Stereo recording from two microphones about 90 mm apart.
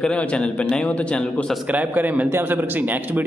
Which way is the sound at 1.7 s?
20° right (ahead or behind).